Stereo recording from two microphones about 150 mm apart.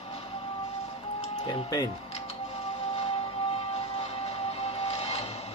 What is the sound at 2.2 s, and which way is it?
Music, 45° left (ahead or behind).